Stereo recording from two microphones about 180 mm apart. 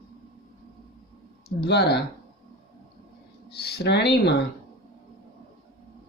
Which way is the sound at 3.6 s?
65° left (ahead or behind).